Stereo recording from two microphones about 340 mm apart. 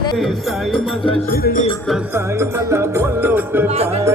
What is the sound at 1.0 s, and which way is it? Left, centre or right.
Speech, left.